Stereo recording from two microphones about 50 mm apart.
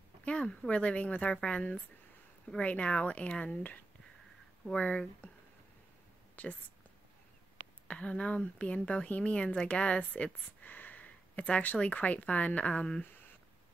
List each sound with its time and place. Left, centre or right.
0.2 s a woman's voice: left
4.7 s a woman's voice: left
6.3 s a sound: left
7.9 s a woman's voice: left